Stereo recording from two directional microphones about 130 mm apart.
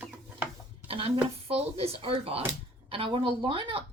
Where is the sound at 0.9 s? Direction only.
45° right (ahead or behind).